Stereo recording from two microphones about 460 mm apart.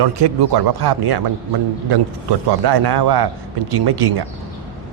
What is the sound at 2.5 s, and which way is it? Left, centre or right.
A man's voice, right.